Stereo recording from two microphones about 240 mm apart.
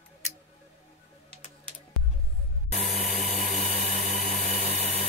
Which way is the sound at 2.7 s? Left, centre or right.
Right.